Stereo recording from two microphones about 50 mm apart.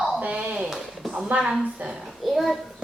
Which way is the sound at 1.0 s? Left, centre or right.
Centre.